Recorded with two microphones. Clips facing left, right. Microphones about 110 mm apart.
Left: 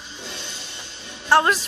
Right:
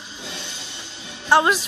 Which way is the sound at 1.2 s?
Centre (ahead or behind).